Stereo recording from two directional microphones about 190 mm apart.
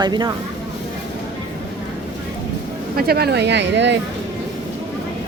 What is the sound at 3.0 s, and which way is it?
Speech, 55° right (ahead or behind).